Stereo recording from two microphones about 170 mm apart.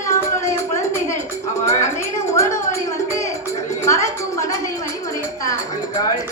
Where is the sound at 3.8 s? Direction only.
20° left (ahead or behind).